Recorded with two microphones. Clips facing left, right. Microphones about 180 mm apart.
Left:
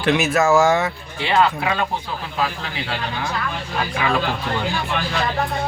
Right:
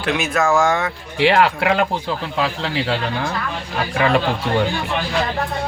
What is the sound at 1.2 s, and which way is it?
Speech, 90° right.